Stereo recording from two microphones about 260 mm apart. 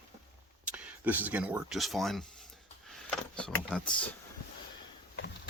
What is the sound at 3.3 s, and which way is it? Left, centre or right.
Speech, centre.